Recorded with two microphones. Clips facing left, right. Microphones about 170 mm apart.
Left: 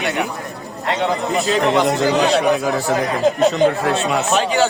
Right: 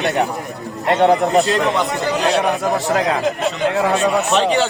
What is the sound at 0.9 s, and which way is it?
Speech, 55° right (ahead or behind).